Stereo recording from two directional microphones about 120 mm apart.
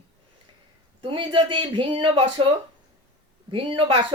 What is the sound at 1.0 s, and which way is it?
Speech, 45° right (ahead or behind).